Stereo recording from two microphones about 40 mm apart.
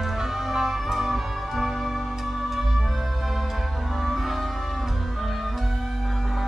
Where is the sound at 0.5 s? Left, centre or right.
Centre.